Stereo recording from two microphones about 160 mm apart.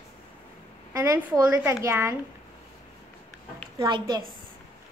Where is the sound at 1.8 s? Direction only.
15° right (ahead or behind).